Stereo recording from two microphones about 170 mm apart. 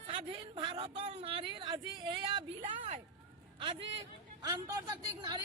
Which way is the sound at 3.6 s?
30° right (ahead or behind).